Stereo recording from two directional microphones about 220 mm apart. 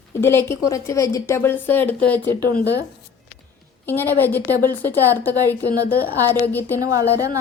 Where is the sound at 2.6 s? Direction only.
50° left (ahead or behind).